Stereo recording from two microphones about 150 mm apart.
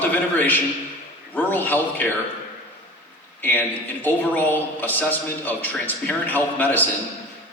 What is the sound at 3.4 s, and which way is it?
A man's voice, 10° left (ahead or behind).